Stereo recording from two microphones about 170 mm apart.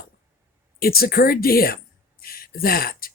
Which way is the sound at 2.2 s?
60° left (ahead or behind).